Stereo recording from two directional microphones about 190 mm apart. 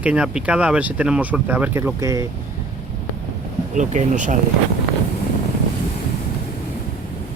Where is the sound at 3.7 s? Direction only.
40° right (ahead or behind).